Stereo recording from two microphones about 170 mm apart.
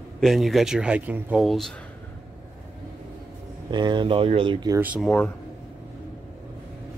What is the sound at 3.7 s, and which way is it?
Speech, 25° right (ahead or behind).